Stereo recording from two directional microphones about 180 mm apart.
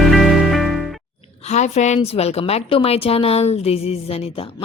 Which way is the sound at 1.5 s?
40° left (ahead or behind).